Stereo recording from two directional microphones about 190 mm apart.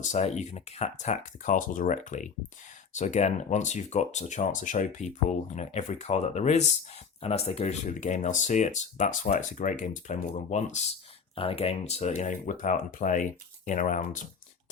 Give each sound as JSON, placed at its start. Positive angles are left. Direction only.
{"t": 0.2, "sound": "speech", "side_deg": 35}